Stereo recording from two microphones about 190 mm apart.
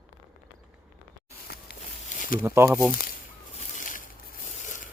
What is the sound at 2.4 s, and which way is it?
Speech, 15° right (ahead or behind).